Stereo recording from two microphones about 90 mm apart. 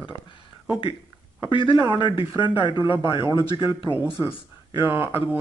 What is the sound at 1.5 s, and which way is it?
Speech, 65° left (ahead or behind).